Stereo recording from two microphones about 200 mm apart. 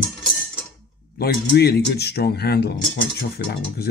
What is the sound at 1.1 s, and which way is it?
Speech, 50° left (ahead or behind).